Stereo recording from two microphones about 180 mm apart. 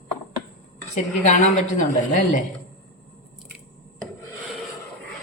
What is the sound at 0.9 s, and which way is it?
A woman's voice, 40° left (ahead or behind).